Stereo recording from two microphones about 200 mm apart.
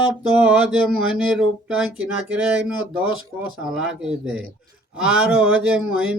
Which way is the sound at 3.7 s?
5° right (ahead or behind).